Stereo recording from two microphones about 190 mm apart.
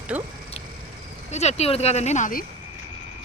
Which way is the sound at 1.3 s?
35° left (ahead or behind).